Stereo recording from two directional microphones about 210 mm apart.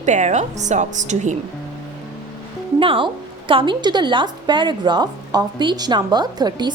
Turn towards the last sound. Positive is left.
turn(degrees=-20)  # may be behind; listen again after turning